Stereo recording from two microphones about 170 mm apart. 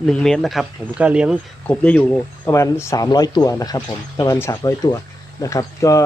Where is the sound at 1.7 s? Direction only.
5° left (ahead or behind).